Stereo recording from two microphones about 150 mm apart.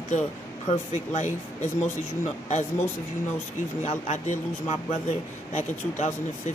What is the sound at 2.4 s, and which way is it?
Speech, 50° left (ahead or behind).